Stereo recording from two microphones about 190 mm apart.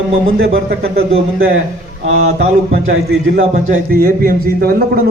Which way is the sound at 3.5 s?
50° right (ahead or behind).